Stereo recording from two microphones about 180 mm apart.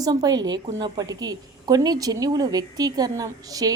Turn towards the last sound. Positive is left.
turn(degrees=-20)  # may be behind; listen again after turning